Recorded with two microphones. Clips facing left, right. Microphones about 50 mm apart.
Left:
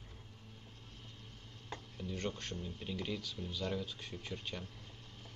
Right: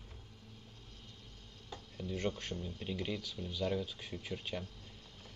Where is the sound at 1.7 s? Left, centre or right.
Left.